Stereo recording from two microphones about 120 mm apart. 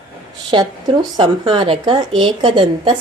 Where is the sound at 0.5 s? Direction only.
35° right (ahead or behind).